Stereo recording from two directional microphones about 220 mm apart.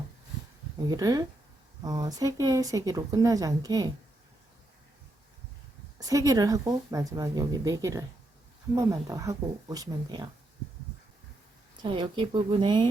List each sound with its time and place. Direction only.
0.9 s speech: 15° right (ahead or behind)
6.0 s speech: 15° right (ahead or behind)
11.8 s speech: 20° right (ahead or behind)